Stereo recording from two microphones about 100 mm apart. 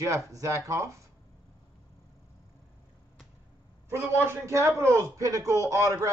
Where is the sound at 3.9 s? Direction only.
30° right (ahead or behind).